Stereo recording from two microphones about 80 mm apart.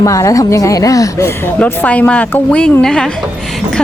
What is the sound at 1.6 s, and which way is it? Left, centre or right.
A woman's voice, centre.